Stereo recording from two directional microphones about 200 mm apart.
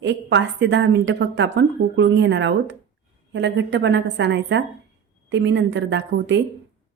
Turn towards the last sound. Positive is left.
turn(degrees=-60)  # may be behind; listen again after turning